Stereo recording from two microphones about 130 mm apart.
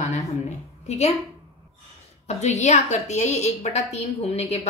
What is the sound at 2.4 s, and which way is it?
A woman's voice, 60° left (ahead or behind).